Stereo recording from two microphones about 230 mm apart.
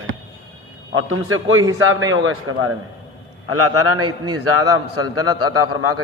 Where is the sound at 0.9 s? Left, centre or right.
Right.